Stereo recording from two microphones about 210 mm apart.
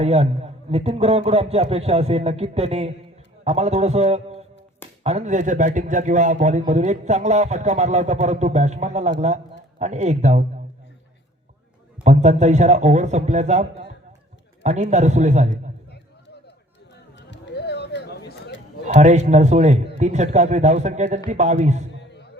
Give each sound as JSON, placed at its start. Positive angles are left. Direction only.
{"t": 0.0, "sound": "a man's voice", "side_deg": -30}
{"t": 12.0, "sound": "a man's voice", "side_deg": -35}
{"t": 17.2, "sound": "a sound", "side_deg": 55}
{"t": 18.9, "sound": "a man's voice", "side_deg": -35}